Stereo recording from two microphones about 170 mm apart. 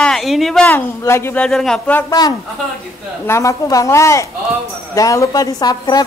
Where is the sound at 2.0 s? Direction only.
20° left (ahead or behind).